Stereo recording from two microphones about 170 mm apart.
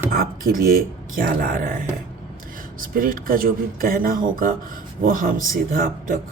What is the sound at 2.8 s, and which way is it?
Speech, 55° right (ahead or behind).